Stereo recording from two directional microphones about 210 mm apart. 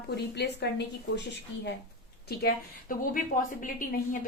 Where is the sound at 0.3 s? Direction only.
55° left (ahead or behind).